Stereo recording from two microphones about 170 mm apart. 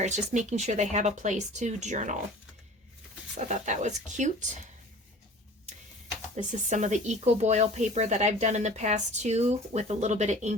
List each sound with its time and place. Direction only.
0.0 s speech: 45° right (ahead or behind)
3.3 s speech: 45° right (ahead or behind)
6.3 s speech: 45° right (ahead or behind)